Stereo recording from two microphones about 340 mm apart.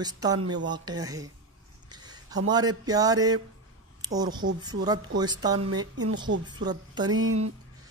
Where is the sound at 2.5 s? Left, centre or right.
Centre.